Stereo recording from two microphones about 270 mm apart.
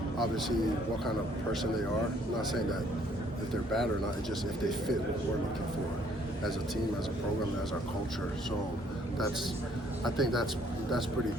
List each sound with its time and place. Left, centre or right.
2.5 s speech: centre
10.0 s speech: centre